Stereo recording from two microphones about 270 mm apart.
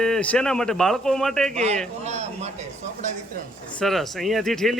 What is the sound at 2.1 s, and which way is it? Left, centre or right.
Speech, right.